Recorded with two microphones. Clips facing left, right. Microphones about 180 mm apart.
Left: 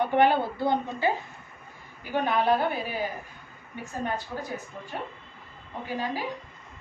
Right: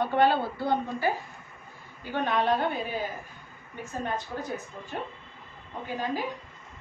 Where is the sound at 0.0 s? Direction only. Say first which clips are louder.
Left 2 dB; 20° left (ahead or behind).